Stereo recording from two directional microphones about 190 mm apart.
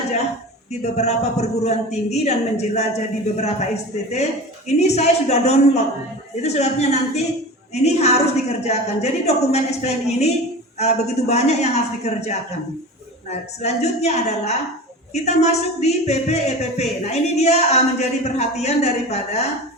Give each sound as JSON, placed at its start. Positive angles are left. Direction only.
{"t": 0.7, "sound": "speech", "side_deg": 35}
{"t": 4.8, "sound": "speech", "side_deg": 35}
{"t": 13.6, "sound": "speech", "side_deg": 35}